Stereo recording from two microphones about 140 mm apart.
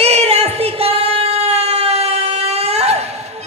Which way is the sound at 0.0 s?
50° right (ahead or behind).